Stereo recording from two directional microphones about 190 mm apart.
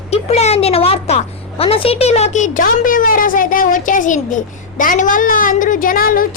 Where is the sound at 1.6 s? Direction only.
30° left (ahead or behind).